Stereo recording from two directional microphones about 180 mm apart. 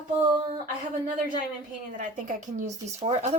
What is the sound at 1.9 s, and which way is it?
Speech, 45° right (ahead or behind).